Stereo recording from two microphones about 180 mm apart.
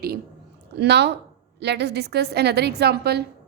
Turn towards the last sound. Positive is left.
turn(degrees=-65)  # may be behind; listen again after turning